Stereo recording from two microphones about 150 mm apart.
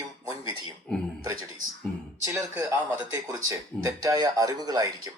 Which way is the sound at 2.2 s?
20° right (ahead or behind).